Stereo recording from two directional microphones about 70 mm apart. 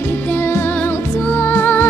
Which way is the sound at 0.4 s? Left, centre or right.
Left.